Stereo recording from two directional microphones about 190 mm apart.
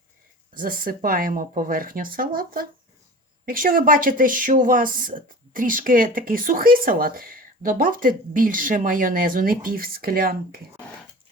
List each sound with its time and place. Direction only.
0.5 s speech: 50° right (ahead or behind)